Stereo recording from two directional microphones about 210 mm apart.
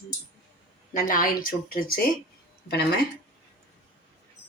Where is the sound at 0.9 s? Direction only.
40° left (ahead or behind).